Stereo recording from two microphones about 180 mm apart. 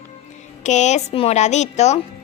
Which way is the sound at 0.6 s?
40° left (ahead or behind).